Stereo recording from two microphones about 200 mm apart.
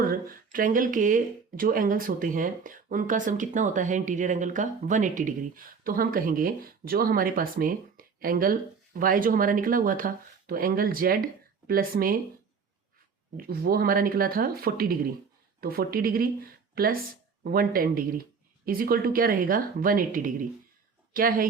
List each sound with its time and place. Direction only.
0.0 s speech: 45° right (ahead or behind)
13.3 s speech: 50° right (ahead or behind)